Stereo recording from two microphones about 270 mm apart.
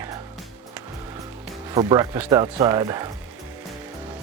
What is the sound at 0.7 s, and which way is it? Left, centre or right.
Music, centre.